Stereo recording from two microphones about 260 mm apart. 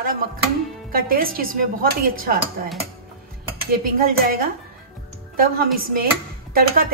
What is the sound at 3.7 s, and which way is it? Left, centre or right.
Speech, right.